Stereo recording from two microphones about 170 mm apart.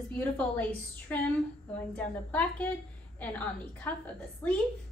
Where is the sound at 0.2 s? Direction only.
10° left (ahead or behind).